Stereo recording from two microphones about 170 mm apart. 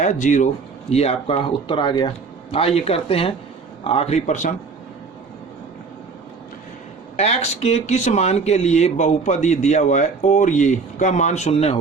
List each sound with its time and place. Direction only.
0.0 s speech: 45° left (ahead or behind)
7.2 s speech: 40° left (ahead or behind)